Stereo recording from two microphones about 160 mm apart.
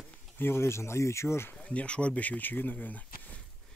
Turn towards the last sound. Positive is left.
turn(degrees=10)  # may be behind; listen again after turning